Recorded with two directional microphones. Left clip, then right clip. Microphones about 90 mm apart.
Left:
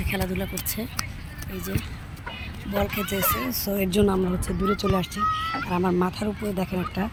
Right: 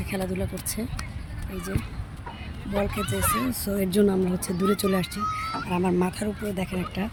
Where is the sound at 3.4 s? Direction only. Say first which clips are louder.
Left 1 dB; 25° right (ahead or behind).